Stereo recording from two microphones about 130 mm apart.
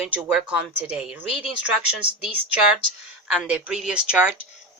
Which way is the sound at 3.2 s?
5° right (ahead or behind).